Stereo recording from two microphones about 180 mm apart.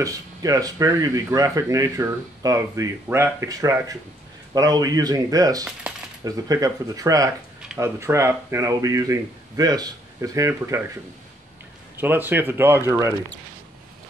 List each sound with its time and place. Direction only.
0.0 s speech: 20° right (ahead or behind)
12.0 s speech: 10° right (ahead or behind)